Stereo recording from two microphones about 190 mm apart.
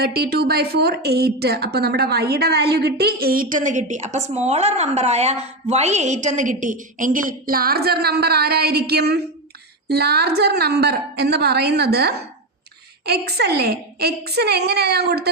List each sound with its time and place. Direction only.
0.0 s a woman's voice: 55° right (ahead or behind)